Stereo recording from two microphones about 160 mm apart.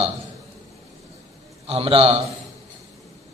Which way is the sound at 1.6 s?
35° right (ahead or behind).